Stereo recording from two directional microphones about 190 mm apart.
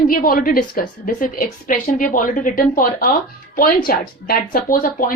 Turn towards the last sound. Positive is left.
turn(degrees=45)  # may be behind; listen again after turning